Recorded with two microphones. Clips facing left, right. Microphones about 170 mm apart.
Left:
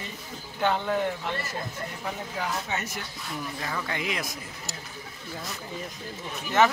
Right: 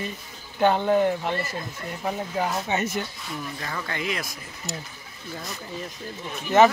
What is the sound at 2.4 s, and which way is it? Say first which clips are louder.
Speech: right 6 dB; 20° right (ahead or behind).